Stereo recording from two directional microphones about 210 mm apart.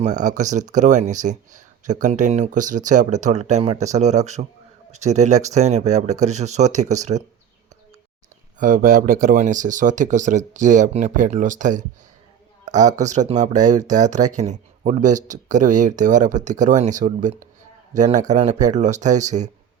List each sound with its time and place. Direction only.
0.0 s speech: 35° right (ahead or behind)
8.5 s speech: 40° right (ahead or behind)
12.6 s a sound: 35° right (ahead or behind)
13.0 s speech: 35° right (ahead or behind)